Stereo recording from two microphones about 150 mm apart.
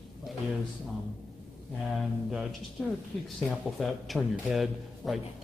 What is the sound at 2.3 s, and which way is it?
Speech, centre (ahead or behind).